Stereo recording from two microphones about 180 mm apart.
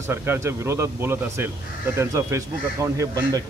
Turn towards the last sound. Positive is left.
turn(degrees=-20)  # may be behind; listen again after turning